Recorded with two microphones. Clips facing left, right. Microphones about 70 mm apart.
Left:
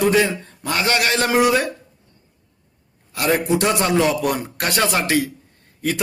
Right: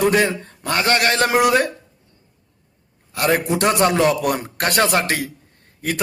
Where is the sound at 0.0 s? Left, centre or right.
Right.